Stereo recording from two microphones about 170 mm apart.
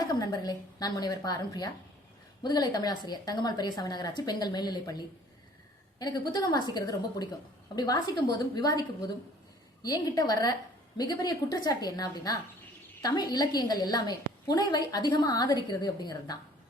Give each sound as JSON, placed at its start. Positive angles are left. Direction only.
{"t": 0.0, "sound": "a woman's voice", "side_deg": 20}